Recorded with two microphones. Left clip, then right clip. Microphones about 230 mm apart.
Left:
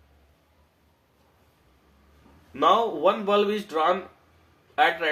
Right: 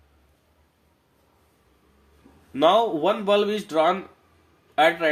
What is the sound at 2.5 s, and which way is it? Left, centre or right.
Speech, right.